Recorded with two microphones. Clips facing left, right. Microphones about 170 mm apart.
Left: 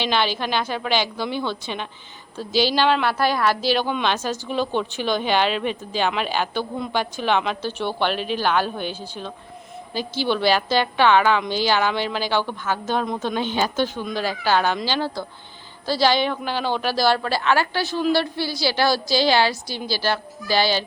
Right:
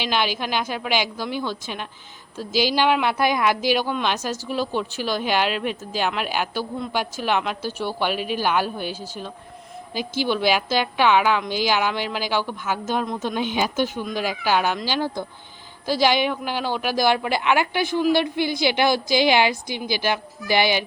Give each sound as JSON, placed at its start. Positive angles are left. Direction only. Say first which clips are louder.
{"t": 0.0, "sound": "a woman's voice", "louder": "left 2 dB", "side_deg": -10}